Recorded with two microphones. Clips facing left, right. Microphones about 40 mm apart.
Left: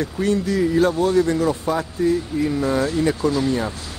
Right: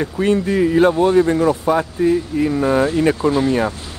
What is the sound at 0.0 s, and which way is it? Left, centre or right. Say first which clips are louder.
A man's voice: right 4 dB; right.